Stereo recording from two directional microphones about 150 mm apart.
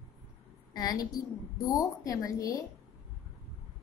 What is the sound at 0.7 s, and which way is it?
A woman's voice, 25° left (ahead or behind).